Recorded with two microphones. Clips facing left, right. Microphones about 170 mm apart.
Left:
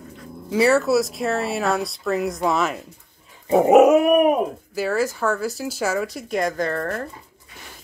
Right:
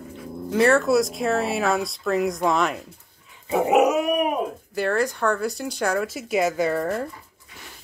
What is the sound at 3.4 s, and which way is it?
Dog, 40° left (ahead or behind).